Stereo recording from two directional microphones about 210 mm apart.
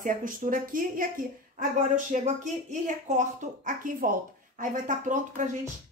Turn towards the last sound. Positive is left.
turn(degrees=-35)  # may be behind; listen again after turning